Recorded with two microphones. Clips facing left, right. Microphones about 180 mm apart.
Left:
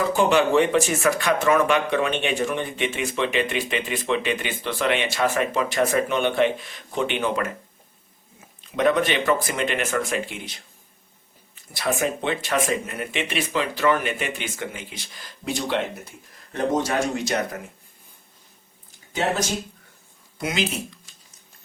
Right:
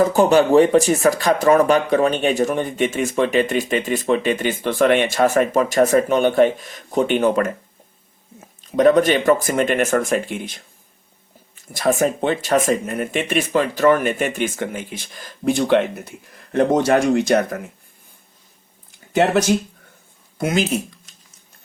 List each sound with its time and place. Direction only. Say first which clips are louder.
0.0 s speech: right 5 dB; 40° right (ahead or behind)
8.6 s speech: right 7 dB; 40° right (ahead or behind)
11.7 s speech: right 6 dB; 45° right (ahead or behind)
20.4 s speech: right 6 dB; 50° right (ahead or behind)